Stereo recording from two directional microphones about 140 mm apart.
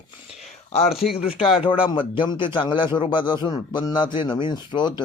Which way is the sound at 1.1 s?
40° left (ahead or behind).